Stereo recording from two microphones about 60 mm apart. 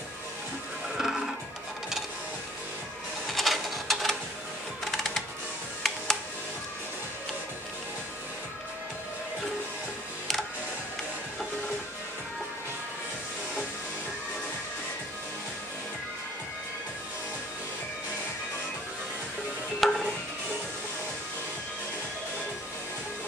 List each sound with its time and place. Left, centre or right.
0.9 s music: centre
3.3 s a sound: centre
4.9 s music: centre
19.8 s music: centre